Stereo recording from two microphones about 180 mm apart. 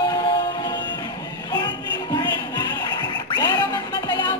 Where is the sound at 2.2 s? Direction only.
25° left (ahead or behind).